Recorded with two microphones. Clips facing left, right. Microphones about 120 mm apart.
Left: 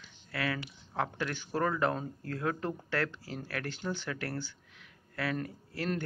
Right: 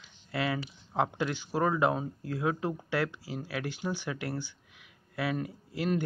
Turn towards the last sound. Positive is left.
turn(degrees=-10)  # may be behind; listen again after turning